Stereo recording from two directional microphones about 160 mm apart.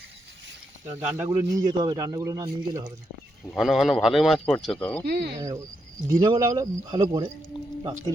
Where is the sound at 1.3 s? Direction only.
25° right (ahead or behind).